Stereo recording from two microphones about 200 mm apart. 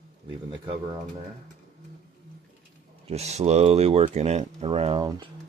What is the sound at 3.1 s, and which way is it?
Speech, 30° right (ahead or behind).